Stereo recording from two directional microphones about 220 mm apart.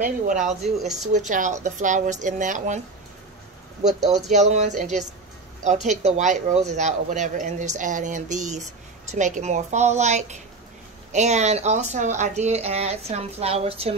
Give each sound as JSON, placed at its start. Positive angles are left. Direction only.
{"t": 0.4, "sound": "speech", "side_deg": 0}
{"t": 1.1, "sound": "speech", "side_deg": -35}
{"t": 4.3, "sound": "speech", "side_deg": -30}